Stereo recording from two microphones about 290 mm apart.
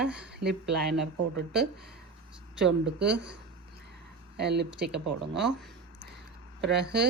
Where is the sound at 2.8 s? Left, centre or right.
Right.